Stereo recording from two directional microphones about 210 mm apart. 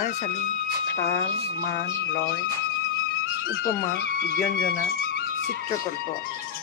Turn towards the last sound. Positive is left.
turn(degrees=45)  # may be behind; listen again after turning